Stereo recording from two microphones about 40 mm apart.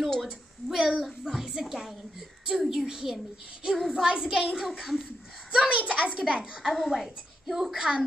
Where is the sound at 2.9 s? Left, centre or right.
Centre.